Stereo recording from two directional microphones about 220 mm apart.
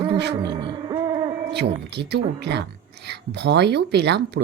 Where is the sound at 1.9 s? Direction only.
50° right (ahead or behind).